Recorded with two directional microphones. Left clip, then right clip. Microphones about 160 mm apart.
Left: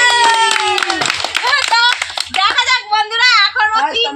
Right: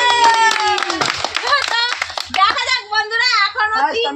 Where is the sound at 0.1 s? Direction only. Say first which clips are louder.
Left 1 dB; 15° left (ahead or behind).